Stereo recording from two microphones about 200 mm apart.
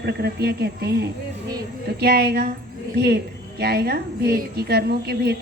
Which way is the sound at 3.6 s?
50° right (ahead or behind).